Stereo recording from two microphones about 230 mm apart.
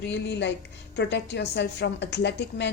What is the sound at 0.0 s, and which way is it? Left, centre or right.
A woman's voice, left.